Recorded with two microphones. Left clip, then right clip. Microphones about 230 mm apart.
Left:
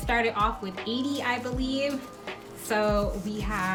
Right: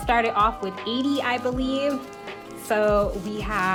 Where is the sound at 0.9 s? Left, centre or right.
Centre.